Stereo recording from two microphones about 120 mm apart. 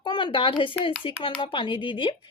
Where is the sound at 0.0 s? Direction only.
40° left (ahead or behind).